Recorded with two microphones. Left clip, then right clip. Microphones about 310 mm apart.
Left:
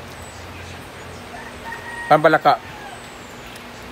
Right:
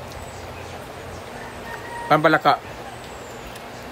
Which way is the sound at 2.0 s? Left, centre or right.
Centre.